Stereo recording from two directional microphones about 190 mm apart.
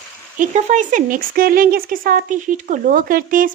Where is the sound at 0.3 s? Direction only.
40° right (ahead or behind).